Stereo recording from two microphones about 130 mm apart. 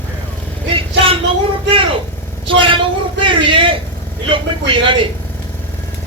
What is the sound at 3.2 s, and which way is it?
Speech, 40° right (ahead or behind).